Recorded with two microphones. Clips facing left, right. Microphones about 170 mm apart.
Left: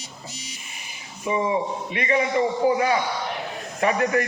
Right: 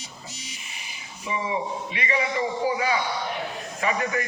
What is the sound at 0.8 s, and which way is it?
A man's voice, 50° left (ahead or behind).